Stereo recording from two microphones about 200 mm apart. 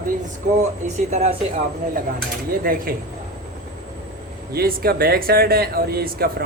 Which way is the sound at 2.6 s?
45° right (ahead or behind).